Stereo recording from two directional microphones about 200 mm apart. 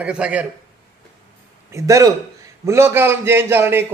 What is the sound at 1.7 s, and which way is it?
A man's voice, 15° right (ahead or behind).